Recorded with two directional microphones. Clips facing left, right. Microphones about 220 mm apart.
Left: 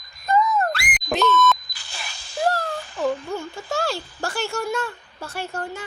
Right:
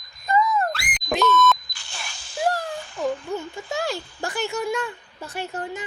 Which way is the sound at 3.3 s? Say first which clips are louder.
Left 1 dB; 15° right (ahead or behind).